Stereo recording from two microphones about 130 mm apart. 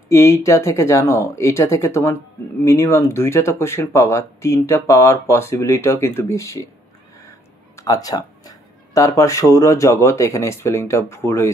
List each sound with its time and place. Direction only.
0.1 s speech: 20° left (ahead or behind)